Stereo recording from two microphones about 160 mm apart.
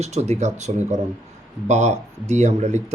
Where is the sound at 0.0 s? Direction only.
45° right (ahead or behind).